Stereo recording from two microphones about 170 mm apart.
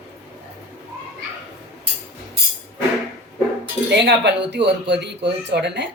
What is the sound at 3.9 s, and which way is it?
Speech, 90° right.